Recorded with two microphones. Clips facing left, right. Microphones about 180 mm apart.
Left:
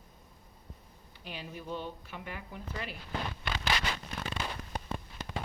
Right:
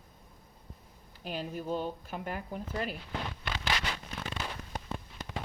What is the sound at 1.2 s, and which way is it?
Speech, 45° right (ahead or behind).